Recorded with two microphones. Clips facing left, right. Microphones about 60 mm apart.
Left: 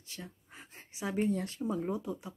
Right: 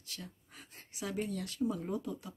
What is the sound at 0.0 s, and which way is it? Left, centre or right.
Speech, left.